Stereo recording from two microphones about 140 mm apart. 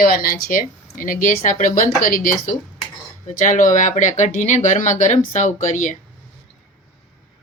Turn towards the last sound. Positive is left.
turn(degrees=60)  # may be behind; listen again after turning